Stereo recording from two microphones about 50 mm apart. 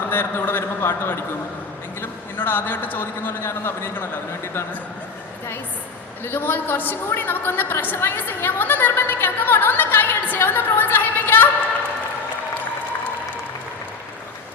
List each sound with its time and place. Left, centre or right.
0.1 s a sound: left
2.0 s a man's voice: left
6.2 s a woman's voice: left